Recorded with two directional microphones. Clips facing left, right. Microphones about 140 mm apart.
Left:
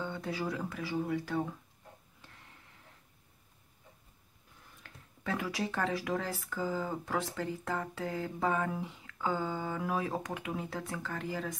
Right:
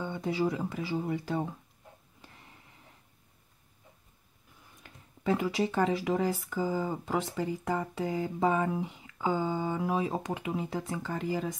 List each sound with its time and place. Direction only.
0.0 s speech: 20° right (ahead or behind)
2.2 s a sound: 15° right (ahead or behind)
4.8 s speech: 20° right (ahead or behind)